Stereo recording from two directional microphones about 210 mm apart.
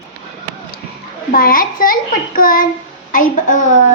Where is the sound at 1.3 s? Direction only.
45° left (ahead or behind).